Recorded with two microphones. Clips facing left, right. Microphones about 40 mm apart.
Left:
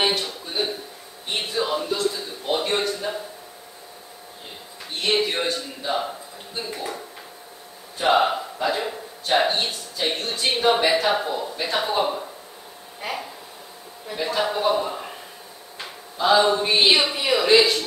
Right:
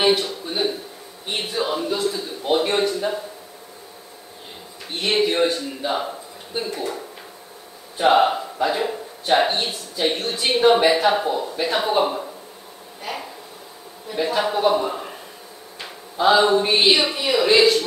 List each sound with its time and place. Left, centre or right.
0.0 s a man's voice: centre
5.0 s a man's voice: centre
8.2 s speech: centre
13.0 s speech: centre
14.1 s a man's voice: centre
16.2 s speech: centre
17.1 s a man's voice: centre